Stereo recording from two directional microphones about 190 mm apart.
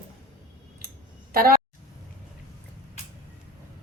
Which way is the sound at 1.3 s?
50° right (ahead or behind).